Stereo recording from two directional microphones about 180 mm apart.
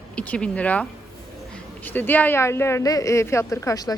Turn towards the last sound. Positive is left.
turn(degrees=20)  # may be behind; listen again after turning